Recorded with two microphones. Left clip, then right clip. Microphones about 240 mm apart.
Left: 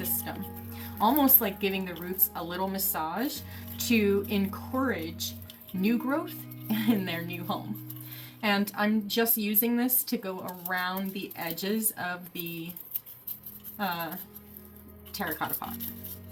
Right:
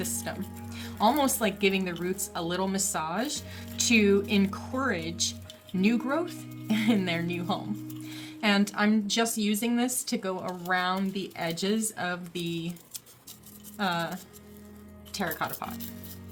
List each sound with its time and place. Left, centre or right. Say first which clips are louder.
0.0 s speech: right 2 dB; right
13.7 s speech: right 3 dB; right
15.1 s speech: right 1 dB; right